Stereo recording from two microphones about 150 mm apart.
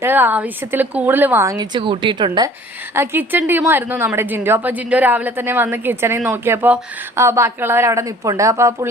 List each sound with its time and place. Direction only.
0.0 s a woman's voice: 10° right (ahead or behind); by 2.5 s 30° right (ahead or behind)
2.9 s a woman's voice: 15° right (ahead or behind)